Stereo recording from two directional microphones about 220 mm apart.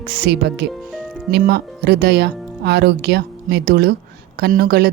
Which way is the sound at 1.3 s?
50° right (ahead or behind).